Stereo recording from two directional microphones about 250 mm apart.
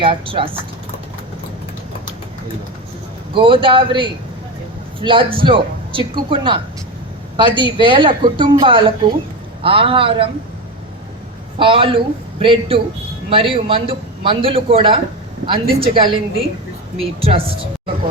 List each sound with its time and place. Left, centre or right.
0.0 s a woman's voice: right
3.3 s a woman's voice: centre
11.6 s a woman's voice: right